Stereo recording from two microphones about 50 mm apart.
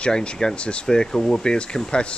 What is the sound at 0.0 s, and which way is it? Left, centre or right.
Speech, centre.